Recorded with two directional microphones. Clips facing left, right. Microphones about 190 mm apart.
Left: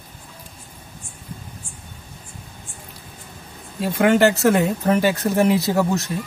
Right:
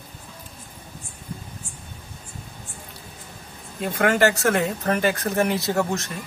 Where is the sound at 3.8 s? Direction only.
30° left (ahead or behind).